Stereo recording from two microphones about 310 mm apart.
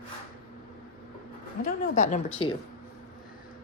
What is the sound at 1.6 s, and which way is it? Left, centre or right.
Speech, left.